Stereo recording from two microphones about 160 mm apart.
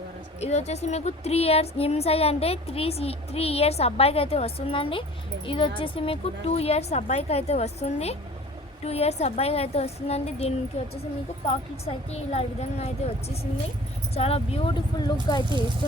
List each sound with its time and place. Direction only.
0.3 s a woman's voice: 45° left (ahead or behind); by 15.4 s 25° left (ahead or behind)